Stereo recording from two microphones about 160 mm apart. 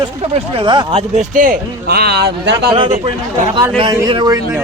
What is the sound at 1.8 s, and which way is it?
Speech, 85° right.